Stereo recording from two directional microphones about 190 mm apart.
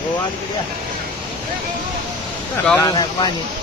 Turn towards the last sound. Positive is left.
turn(degrees=20)  # may be behind; listen again after turning